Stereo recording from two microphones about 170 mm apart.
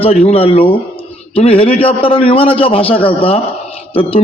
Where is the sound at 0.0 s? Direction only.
40° left (ahead or behind).